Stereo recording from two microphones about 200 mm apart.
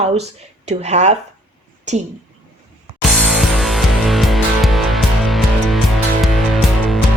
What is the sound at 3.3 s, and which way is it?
Music, centre (ahead or behind).